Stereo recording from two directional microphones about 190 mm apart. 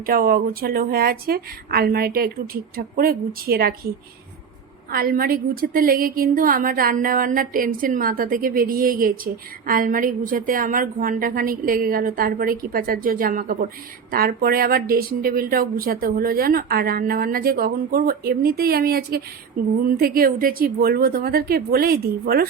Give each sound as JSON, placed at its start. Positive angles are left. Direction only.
{"t": 0.0, "sound": "a woman's voice", "side_deg": -50}
{"t": 4.9, "sound": "a woman's voice", "side_deg": -50}